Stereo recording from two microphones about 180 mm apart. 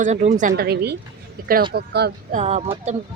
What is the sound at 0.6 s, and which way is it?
Speech, 65° right (ahead or behind).